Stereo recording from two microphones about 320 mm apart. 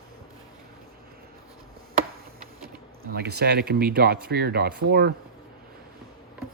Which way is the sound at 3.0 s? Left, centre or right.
Right.